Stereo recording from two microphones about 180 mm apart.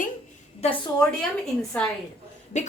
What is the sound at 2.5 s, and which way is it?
Speech, 40° left (ahead or behind).